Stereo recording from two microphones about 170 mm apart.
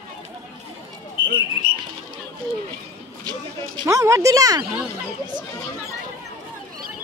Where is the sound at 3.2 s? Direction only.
25° right (ahead or behind).